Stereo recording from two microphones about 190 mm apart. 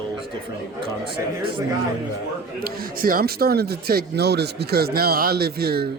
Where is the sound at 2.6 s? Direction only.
50° right (ahead or behind).